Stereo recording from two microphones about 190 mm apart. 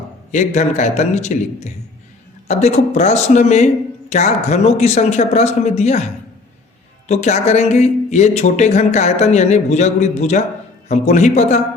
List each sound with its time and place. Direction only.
0.3 s speech: 40° left (ahead or behind)
7.1 s speech: 35° left (ahead or behind)